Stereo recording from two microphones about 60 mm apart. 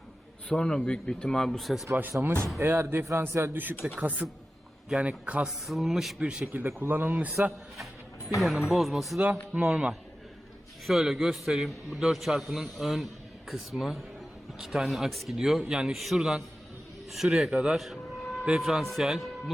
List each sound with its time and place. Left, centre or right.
0.4 s speech: centre
1.5 s a man's voice: centre
2.2 s speech: right
3.8 s speech: centre
5.6 s a man's voice: centre
6.2 s a man's voice: centre
6.5 s speech: right
8.4 s a man's voice: centre
9.5 s speech: right
10.8 s a man's voice: centre
17.7 s a man's voice: centre